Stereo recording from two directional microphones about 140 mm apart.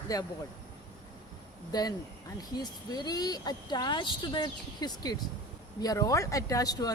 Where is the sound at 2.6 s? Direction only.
30° left (ahead or behind).